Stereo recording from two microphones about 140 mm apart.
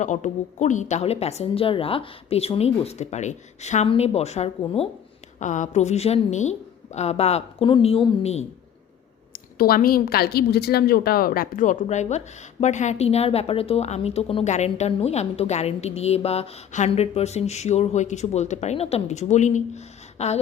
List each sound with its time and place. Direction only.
0.0 s a woman's voice: 60° left (ahead or behind)
5.4 s a woman's voice: 65° left (ahead or behind)
9.3 s a woman's voice: 90° left; by 20.4 s 50° left (ahead or behind)